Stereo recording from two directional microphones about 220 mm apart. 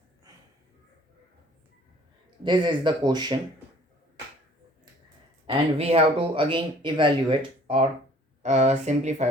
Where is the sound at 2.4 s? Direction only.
20° right (ahead or behind).